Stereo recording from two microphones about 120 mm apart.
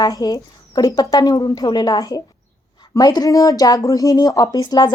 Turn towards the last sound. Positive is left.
turn(degrees=35)  # may be behind; listen again after turning